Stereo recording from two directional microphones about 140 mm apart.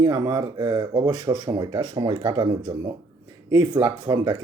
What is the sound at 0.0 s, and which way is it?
Speech, 30° right (ahead or behind).